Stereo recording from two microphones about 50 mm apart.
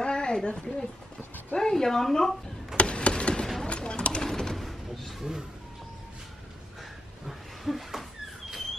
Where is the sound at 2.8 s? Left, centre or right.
Left.